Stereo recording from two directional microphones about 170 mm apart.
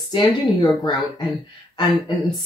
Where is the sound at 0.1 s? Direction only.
25° left (ahead or behind).